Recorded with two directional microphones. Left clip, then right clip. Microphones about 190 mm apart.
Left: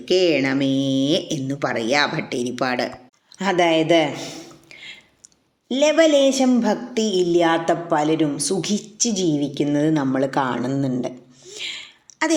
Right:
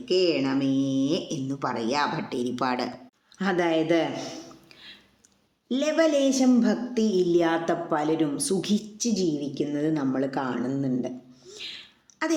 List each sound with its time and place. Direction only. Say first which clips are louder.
0.0 s a woman's voice: left 6 dB; 15° left (ahead or behind)